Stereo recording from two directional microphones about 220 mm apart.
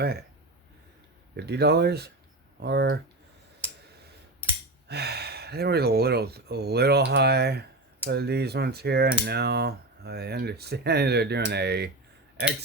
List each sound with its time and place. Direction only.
1.4 s speech: 50° right (ahead or behind)
4.9 s speech: 50° right (ahead or behind)